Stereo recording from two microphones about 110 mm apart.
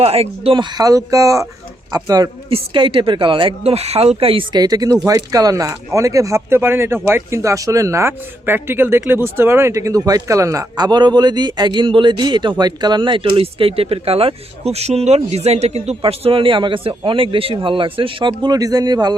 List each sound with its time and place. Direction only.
0.0 s speech: 65° right (ahead or behind)
0.6 s speech: 35° right (ahead or behind)
2.5 s speech: 50° right (ahead or behind)
3.6 s speech: 70° right (ahead or behind)
4.5 s speech: 35° right (ahead or behind); by 16.0 s 80° right
16.0 s speech: 55° right (ahead or behind); by 19.1 s 35° right (ahead or behind)